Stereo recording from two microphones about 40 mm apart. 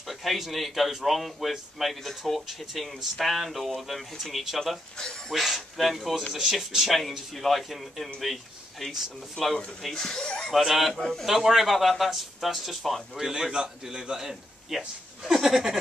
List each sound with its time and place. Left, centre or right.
0.0 s a man's voice: centre
9.9 s speech: centre
10.5 s a man's voice: centre
11.0 s a man's voice: centre
11.2 s a man's voice: centre
13.2 s a man's voice: centre